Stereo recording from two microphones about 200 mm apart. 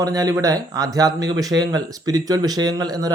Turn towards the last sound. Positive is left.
turn(degrees=-20)  # may be behind; listen again after turning